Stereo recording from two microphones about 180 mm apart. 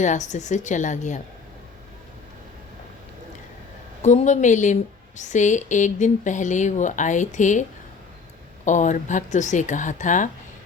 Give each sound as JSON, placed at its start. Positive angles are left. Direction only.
{"t": 0.0, "sound": "a woman's voice", "side_deg": 40}
{"t": 4.0, "sound": "a woman's voice", "side_deg": 40}
{"t": 8.6, "sound": "a woman's voice", "side_deg": 45}